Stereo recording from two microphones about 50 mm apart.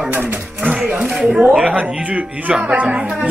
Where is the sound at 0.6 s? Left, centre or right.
Right.